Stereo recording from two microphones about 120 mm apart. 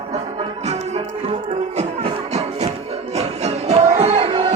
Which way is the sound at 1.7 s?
60° right (ahead or behind).